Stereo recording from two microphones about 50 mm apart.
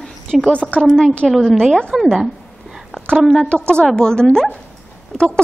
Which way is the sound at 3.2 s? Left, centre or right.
Centre.